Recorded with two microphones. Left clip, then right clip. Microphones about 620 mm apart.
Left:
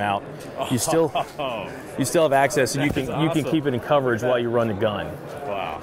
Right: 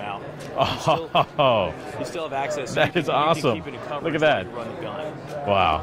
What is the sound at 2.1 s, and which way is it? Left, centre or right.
Speech, left.